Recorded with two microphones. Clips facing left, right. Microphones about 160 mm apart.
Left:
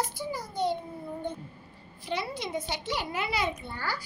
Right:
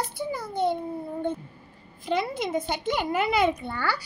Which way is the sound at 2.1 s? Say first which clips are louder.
Right 6 dB; 50° right (ahead or behind).